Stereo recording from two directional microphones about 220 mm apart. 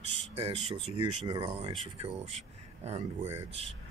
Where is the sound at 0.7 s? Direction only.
20° right (ahead or behind).